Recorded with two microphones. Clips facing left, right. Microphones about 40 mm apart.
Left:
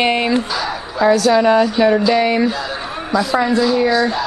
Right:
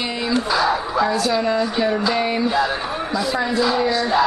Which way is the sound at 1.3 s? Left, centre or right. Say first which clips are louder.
Left 7 dB; left.